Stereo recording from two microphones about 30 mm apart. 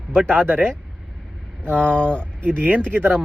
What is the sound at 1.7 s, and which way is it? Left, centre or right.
Speech, left.